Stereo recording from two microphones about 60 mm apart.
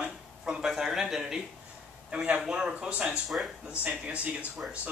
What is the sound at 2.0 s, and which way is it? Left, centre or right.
Speech, centre.